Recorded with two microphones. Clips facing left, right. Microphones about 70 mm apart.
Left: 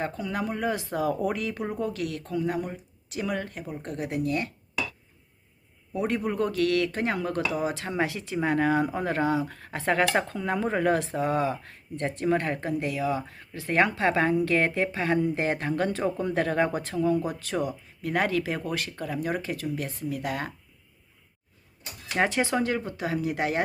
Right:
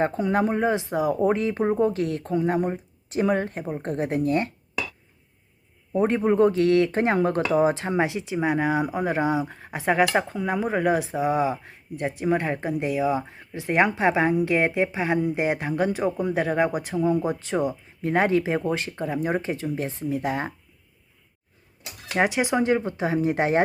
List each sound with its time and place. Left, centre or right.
0.0 s speech: right
1.2 s speech: right
5.9 s speech: right
22.2 s speech: centre